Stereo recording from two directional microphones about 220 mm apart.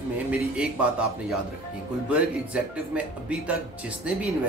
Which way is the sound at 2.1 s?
5° right (ahead or behind).